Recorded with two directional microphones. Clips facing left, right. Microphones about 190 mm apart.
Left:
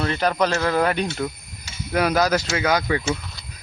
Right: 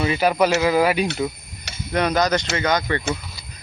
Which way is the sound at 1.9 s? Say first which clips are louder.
Even; 5° left (ahead or behind).